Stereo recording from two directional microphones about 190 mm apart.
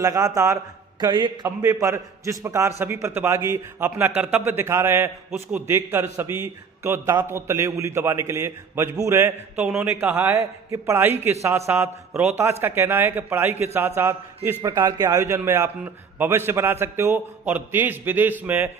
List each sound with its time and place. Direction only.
0.0 s a man's voice: 20° right (ahead or behind)